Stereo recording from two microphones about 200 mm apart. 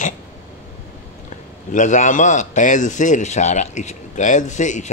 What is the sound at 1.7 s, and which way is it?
A man's voice, 40° left (ahead or behind).